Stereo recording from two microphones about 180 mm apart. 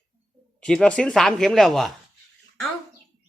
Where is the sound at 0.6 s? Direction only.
5° left (ahead or behind).